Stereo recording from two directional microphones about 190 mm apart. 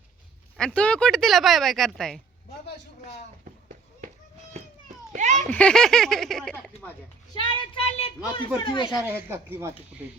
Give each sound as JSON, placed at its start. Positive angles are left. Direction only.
{"t": 0.5, "sound": "speech", "side_deg": 5}
{"t": 5.1, "sound": "a child's voice", "side_deg": -40}
{"t": 5.5, "sound": "speech", "side_deg": 5}
{"t": 7.3, "sound": "speech", "side_deg": 30}
{"t": 9.0, "sound": "speech", "side_deg": -10}